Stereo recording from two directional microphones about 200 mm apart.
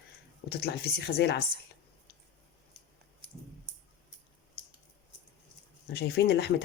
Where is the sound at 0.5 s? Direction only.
55° left (ahead or behind).